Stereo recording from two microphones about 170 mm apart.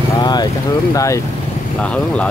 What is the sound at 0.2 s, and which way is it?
Speech, 25° left (ahead or behind).